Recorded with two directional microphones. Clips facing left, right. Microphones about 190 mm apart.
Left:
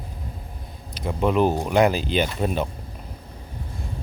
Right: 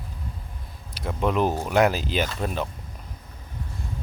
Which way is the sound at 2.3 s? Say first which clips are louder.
Left 4 dB; 15° left (ahead or behind).